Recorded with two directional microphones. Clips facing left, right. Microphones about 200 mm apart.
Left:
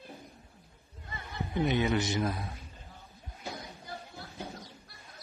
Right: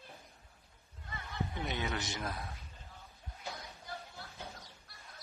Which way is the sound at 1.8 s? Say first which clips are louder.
Left 10 dB; 15° left (ahead or behind).